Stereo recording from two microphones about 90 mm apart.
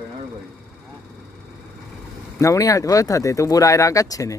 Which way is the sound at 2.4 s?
35° left (ahead or behind).